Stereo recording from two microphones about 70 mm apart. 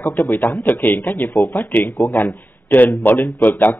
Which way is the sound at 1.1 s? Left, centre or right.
Left.